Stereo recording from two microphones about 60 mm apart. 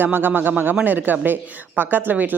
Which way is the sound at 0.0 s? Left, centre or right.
Right.